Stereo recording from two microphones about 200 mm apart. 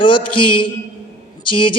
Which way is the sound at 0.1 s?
25° left (ahead or behind).